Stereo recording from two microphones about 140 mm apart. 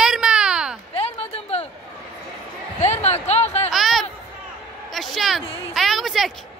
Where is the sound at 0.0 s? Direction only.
5° right (ahead or behind).